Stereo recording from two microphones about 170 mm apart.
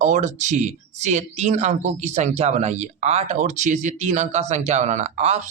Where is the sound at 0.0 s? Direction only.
45° right (ahead or behind).